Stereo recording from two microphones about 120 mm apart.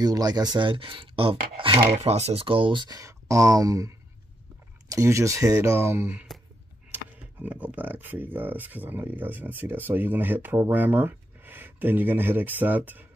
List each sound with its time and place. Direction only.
0.0 s speech: 35° right (ahead or behind)
1.9 s speech: 65° right (ahead or behind); by 6.2 s 15° right (ahead or behind)
7.4 s speech: 15° right (ahead or behind)